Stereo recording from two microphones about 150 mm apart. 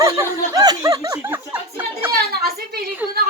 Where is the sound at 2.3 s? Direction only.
90° right.